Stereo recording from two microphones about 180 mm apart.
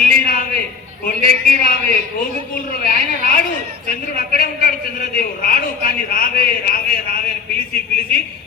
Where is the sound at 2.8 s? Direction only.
55° left (ahead or behind).